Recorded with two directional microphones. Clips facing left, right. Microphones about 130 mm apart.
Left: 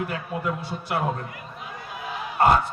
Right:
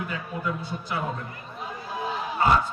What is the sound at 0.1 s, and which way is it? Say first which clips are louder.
Speech: left 2 dB; 70° left (ahead or behind).